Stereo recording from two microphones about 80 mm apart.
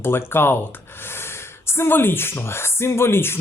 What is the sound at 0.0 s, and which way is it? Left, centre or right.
Speech, left.